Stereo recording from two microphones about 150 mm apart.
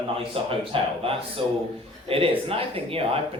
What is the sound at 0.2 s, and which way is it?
Speech, 35° right (ahead or behind).